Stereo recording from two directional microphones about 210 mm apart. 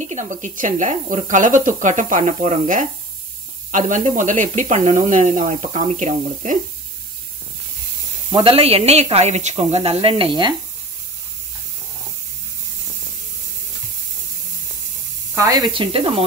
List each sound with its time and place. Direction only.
0.0 s speech: 35° right (ahead or behind)
8.3 s speech: 25° right (ahead or behind)
15.3 s speech: 15° right (ahead or behind)